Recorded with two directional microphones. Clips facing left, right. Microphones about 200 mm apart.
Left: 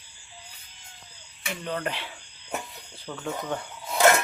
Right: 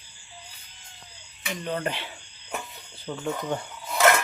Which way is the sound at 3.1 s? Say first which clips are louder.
Right 3 dB; 20° right (ahead or behind).